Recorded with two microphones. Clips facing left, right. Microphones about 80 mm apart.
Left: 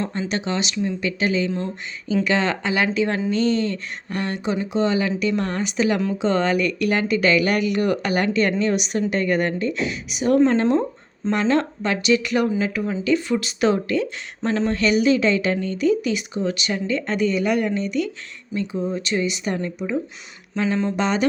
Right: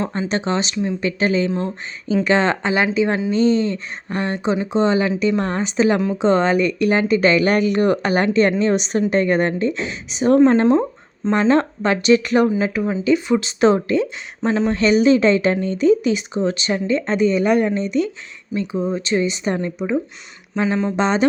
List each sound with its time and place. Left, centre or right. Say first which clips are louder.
0.1 s speech: right 4 dB; right
1.5 s speech: right 3 dB; right
2.2 s speech: right 6 dB; right